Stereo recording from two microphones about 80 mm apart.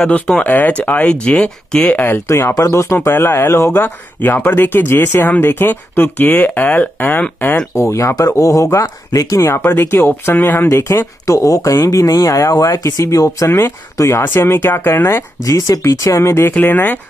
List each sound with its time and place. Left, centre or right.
0.0 s speech: centre
2.1 s speech: left
3.7 s speech: left
7.7 s speech: left
13.5 s speech: left
13.9 s speech: left
14.2 s speech: left
15.4 s speech: left
16.2 s speech: left